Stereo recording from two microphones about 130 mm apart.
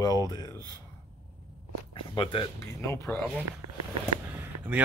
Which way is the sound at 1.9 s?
40° left (ahead or behind).